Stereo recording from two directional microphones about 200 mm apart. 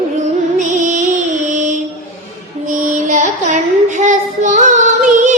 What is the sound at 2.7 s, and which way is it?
Child singing, 40° right (ahead or behind).